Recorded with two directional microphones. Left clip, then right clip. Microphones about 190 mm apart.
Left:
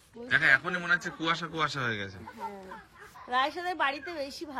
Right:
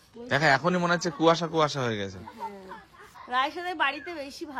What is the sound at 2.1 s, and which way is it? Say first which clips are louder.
Speech: right 2 dB; centre (ahead or behind).